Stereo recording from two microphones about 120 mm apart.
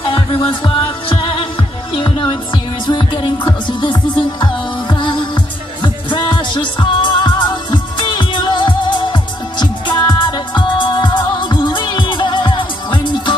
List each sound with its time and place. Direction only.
0.0 s music: 45° left (ahead or behind)